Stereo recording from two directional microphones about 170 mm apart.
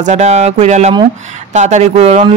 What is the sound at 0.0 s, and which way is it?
A woman's voice, 45° right (ahead or behind).